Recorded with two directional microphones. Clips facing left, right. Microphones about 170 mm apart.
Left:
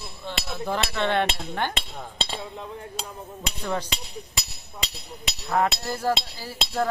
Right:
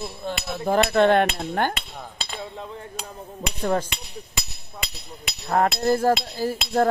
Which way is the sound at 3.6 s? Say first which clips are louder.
Right 6 dB; 45° right (ahead or behind).